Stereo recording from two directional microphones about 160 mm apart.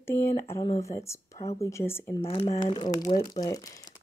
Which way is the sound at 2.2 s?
35° left (ahead or behind).